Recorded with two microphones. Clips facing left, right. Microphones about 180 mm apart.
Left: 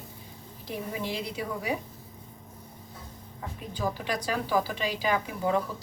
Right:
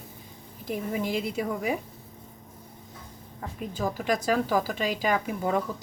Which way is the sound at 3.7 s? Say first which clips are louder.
Right 3 dB; 45° right (ahead or behind).